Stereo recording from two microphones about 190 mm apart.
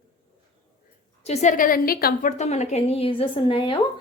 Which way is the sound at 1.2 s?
35° left (ahead or behind).